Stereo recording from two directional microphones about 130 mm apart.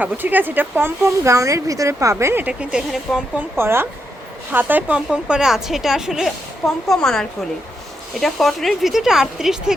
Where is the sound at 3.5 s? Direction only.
20° right (ahead or behind).